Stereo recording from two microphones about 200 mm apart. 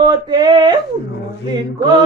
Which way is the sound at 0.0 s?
20° right (ahead or behind).